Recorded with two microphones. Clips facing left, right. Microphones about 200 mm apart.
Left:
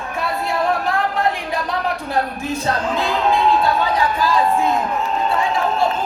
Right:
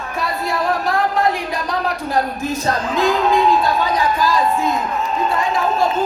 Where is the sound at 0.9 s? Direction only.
40° right (ahead or behind).